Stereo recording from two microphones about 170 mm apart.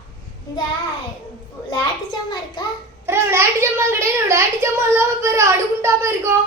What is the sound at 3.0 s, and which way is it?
A child's voice, 15° right (ahead or behind).